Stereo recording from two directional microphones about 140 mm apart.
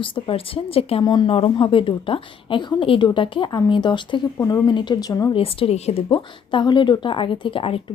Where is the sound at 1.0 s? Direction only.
35° left (ahead or behind).